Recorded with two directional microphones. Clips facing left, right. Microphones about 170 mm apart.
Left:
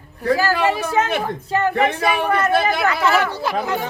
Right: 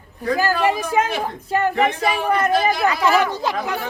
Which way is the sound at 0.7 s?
10° right (ahead or behind).